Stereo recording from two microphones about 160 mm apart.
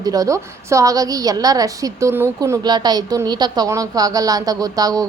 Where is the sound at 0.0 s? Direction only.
20° right (ahead or behind).